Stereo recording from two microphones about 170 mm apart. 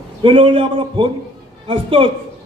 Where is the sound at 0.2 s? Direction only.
30° right (ahead or behind).